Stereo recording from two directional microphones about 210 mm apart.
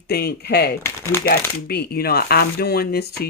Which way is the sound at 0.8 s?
10° left (ahead or behind).